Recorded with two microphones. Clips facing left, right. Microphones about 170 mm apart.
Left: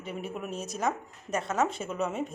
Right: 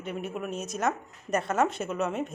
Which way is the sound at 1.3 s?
Centre (ahead or behind).